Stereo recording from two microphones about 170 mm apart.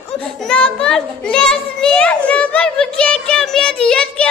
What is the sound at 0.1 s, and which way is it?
A child's voice, 5° left (ahead or behind).